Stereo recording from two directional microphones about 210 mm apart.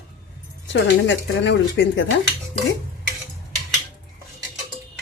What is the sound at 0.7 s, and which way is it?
Speech, 60° left (ahead or behind).